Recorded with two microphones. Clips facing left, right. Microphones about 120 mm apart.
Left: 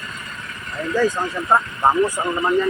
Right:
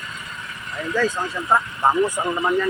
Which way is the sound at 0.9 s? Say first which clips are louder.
Left 3 dB; 15° left (ahead or behind).